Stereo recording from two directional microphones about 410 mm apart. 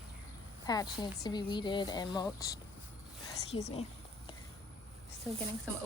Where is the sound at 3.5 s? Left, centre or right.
Centre.